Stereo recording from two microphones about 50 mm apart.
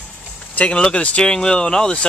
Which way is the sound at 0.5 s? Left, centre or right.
Left.